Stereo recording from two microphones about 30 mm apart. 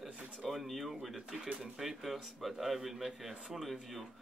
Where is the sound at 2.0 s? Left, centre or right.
Centre.